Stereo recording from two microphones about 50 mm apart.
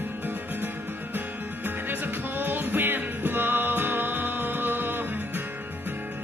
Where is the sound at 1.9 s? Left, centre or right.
Right.